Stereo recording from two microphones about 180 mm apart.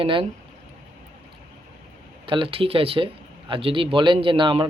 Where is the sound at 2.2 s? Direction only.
30° right (ahead or behind).